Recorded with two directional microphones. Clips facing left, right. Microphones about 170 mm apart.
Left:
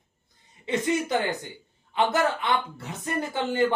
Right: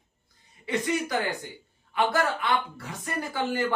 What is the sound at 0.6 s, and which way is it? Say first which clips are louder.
A woman's voice: left 2 dB; 20° left (ahead or behind).